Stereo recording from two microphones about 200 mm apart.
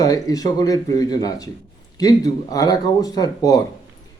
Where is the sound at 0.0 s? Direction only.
20° left (ahead or behind).